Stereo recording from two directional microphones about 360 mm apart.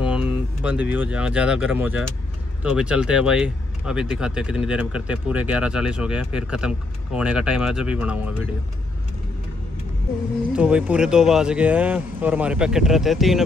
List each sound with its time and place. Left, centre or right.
0.0 s a sound: centre
0.8 s speech: centre
10.5 s speech: centre